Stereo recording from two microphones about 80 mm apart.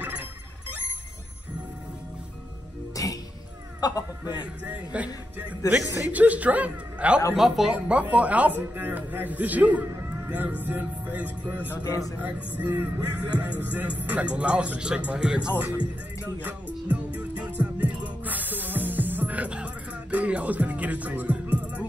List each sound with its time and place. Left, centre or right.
0.0 s a sound: right
2.9 s music: left
3.8 s speech: left
4.9 s speech: centre
7.3 s speech: centre
7.7 s speech: centre
11.8 s speech: left
12.2 s speech: right
16.3 s music: centre